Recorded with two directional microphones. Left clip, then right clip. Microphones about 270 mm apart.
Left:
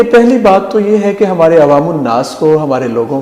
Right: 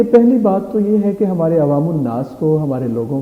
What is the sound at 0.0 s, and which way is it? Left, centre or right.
A man's voice, centre.